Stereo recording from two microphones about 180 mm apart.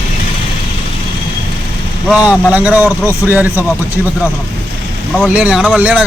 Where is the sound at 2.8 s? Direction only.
15° left (ahead or behind).